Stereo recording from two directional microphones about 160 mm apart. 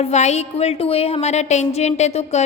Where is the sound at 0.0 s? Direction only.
45° left (ahead or behind).